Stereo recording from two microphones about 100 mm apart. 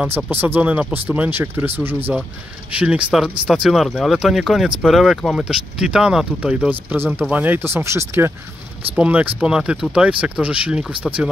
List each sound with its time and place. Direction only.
0.0 s speech: 20° right (ahead or behind)
8.9 s speech: 15° right (ahead or behind)